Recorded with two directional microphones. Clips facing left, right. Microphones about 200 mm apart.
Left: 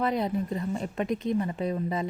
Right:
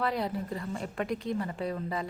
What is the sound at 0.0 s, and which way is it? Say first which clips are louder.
A woman's voice: left 4 dB; 20° left (ahead or behind).